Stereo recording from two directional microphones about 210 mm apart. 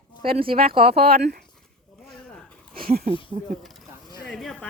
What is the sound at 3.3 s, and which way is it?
Speech, 35° right (ahead or behind).